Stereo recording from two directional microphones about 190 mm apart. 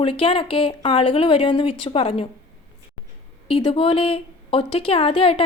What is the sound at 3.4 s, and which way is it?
A woman's voice, 30° left (ahead or behind).